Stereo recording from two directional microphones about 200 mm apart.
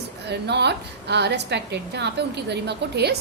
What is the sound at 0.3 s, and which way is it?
A woman's voice, 55° right (ahead or behind).